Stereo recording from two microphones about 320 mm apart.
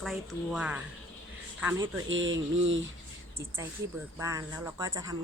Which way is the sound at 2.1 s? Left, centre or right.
Right.